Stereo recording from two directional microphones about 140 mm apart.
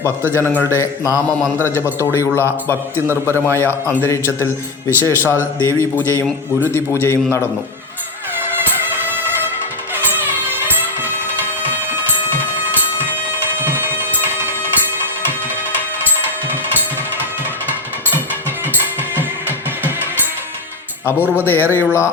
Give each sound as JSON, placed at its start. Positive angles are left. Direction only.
{"t": 0.2, "sound": "a man's voice", "side_deg": -15}
{"t": 0.4, "sound": "a man's voice", "side_deg": 15}
{"t": 9.0, "sound": "music", "side_deg": -15}
{"t": 13.6, "sound": "a sound", "side_deg": -15}
{"t": 21.0, "sound": "a man's voice", "side_deg": 15}